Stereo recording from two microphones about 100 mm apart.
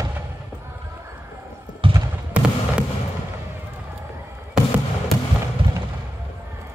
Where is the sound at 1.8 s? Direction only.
60° right (ahead or behind).